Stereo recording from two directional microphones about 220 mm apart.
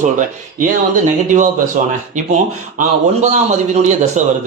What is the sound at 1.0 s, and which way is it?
Speech, 35° right (ahead or behind).